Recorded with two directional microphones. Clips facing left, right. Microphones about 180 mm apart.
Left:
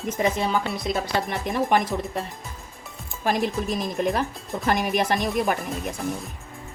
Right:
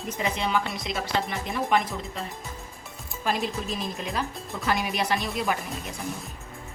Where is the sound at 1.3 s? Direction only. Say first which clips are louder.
Left 5 dB; 55° left (ahead or behind).